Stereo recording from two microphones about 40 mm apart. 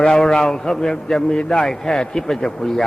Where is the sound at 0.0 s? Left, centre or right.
Centre.